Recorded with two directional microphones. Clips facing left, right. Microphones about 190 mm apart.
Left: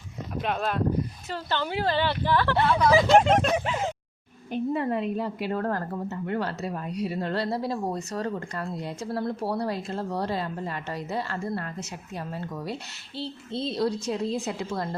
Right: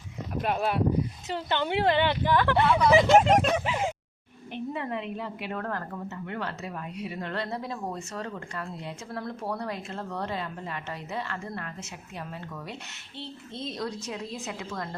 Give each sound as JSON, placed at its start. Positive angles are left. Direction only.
{"t": 0.4, "sound": "speech", "side_deg": -10}
{"t": 3.0, "sound": "speech", "side_deg": 0}
{"t": 3.6, "sound": "speech", "side_deg": -10}
{"t": 4.5, "sound": "a woman's voice", "side_deg": 40}